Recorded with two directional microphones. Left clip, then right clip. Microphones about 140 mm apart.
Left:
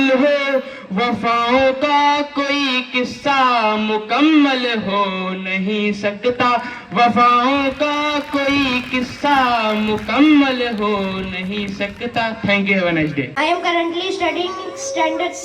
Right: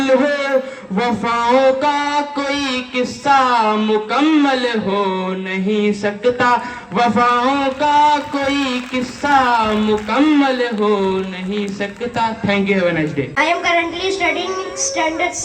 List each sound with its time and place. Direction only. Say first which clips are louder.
0.0 s a man's voice: even; 30° right (ahead or behind)